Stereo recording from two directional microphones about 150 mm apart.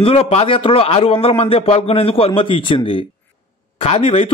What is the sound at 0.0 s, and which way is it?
A man's voice, 40° left (ahead or behind).